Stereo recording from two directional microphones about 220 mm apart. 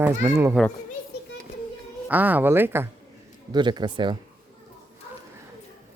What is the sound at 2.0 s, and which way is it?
A child's voice, 5° right (ahead or behind).